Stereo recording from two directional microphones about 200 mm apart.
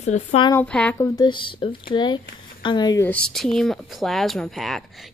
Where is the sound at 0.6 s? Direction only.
5° left (ahead or behind).